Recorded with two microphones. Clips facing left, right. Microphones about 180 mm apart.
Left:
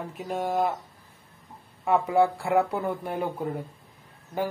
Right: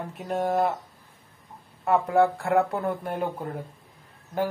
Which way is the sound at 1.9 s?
5° left (ahead or behind).